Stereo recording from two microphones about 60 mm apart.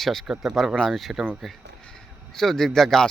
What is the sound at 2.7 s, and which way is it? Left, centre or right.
Speech, centre.